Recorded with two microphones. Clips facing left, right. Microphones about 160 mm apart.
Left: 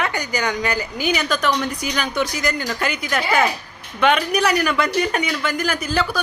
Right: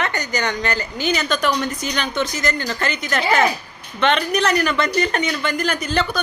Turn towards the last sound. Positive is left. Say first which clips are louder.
# even
turn(degrees=5)  # may be behind; listen again after turning